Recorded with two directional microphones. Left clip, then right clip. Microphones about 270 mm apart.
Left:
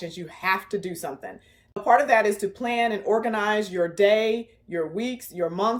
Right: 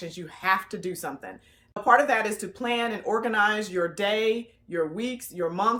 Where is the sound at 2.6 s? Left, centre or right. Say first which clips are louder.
Left 2 dB; right.